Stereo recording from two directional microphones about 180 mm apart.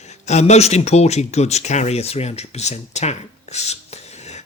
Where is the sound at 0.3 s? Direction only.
40° left (ahead or behind).